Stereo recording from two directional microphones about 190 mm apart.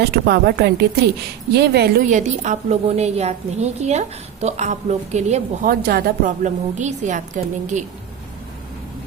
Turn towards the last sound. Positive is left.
turn(degrees=-40)  # may be behind; listen again after turning